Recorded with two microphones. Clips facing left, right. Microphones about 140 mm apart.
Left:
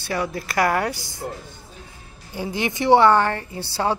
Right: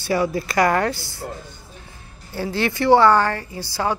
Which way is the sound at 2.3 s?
15° left (ahead or behind).